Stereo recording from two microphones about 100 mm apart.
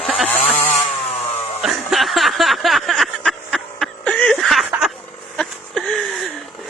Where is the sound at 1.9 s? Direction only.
Centre (ahead or behind).